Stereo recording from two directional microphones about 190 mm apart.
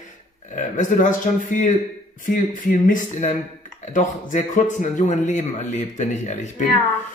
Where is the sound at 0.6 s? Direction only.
40° left (ahead or behind).